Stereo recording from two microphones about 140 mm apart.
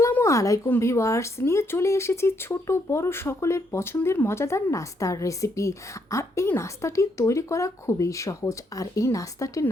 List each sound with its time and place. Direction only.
0.0 s speech: 20° left (ahead or behind)